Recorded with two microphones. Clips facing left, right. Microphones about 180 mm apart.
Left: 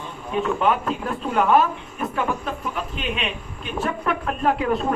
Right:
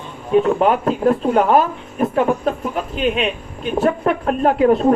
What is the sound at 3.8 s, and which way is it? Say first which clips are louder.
A man's voice: right 7 dB; 40° right (ahead or behind).